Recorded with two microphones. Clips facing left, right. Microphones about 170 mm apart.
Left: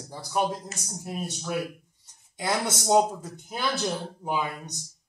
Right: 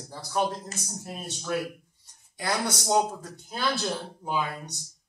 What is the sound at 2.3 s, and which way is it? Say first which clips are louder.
A man's voice: left 1 dB; 20° left (ahead or behind).